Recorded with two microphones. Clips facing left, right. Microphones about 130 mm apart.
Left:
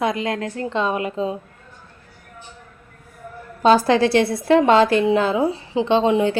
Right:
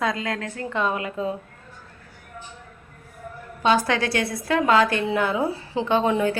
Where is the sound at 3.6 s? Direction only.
35° left (ahead or behind).